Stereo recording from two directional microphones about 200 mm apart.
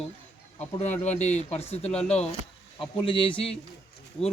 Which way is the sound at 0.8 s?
35° left (ahead or behind).